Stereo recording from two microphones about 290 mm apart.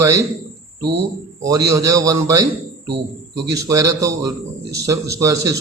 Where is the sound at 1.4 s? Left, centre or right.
Centre.